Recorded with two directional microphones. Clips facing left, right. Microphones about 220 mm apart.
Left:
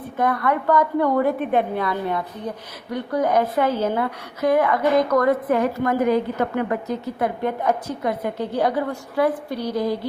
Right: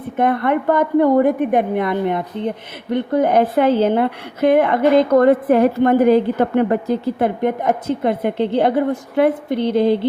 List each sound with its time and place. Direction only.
0.2 s a woman's voice: 25° right (ahead or behind)